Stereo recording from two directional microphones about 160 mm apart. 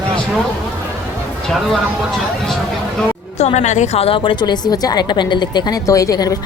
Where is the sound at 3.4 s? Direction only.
45° left (ahead or behind).